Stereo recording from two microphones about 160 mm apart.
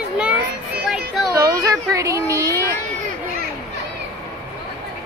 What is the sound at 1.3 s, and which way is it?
Speech, 20° right (ahead or behind).